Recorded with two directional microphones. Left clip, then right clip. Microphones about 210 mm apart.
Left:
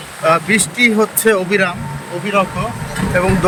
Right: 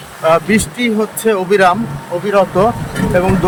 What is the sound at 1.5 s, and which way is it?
Speech, 25° right (ahead or behind).